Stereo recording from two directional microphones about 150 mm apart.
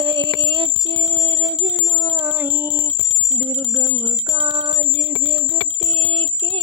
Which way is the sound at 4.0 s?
40° right (ahead or behind).